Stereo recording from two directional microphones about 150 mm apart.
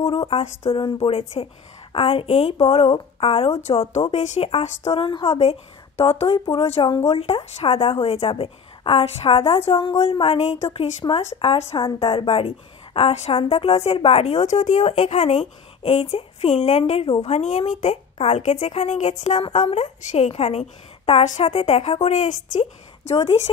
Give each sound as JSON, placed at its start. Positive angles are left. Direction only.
{"t": 0.0, "sound": "a woman's voice", "side_deg": 35}
{"t": 23.1, "sound": "a woman's voice", "side_deg": 40}